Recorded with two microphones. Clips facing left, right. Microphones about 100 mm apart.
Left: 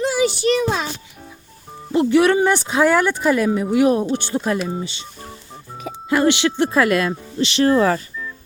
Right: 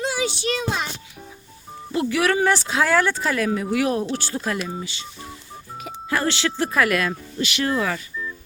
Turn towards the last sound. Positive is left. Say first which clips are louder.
# left 8 dB
turn(degrees=35)  # may be behind; listen again after turning